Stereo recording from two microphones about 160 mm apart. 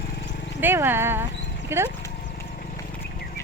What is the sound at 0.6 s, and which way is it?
Speech, 15° right (ahead or behind).